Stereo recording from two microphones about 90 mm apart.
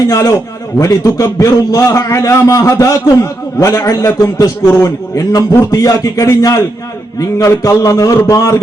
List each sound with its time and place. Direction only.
0.1 s a man's voice: 40° left (ahead or behind)